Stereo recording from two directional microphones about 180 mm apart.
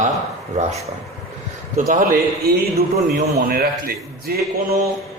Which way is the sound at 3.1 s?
55° right (ahead or behind).